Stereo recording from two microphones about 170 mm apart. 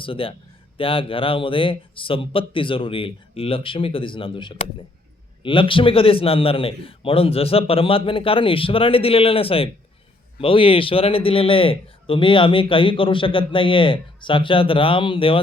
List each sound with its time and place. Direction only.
0.0 s a man's voice: 30° left (ahead or behind)